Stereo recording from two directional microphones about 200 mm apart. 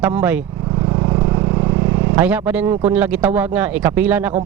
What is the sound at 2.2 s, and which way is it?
Speech, 10° right (ahead or behind).